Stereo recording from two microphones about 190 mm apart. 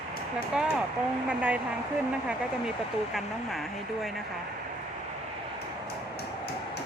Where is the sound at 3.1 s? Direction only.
Centre (ahead or behind).